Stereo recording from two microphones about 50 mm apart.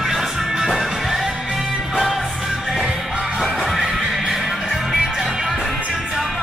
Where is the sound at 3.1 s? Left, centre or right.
Centre.